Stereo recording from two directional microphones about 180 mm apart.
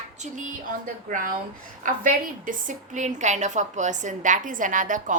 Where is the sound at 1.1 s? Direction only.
45° right (ahead or behind).